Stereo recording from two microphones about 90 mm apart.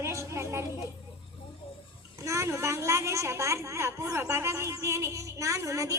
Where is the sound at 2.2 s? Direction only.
35° right (ahead or behind).